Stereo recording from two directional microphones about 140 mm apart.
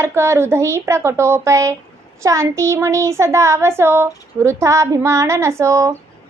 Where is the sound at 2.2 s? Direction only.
20° right (ahead or behind).